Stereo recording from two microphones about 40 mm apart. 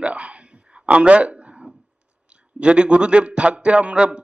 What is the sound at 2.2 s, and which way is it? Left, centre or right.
A man's voice, right.